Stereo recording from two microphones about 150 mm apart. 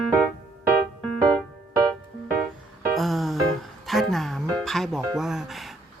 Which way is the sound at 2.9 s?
Centre (ahead or behind).